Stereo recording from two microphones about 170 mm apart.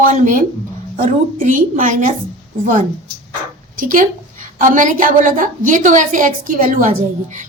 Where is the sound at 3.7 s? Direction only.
50° right (ahead or behind).